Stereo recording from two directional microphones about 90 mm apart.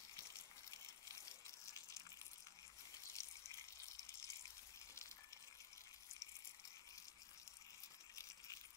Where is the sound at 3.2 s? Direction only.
50° right (ahead or behind).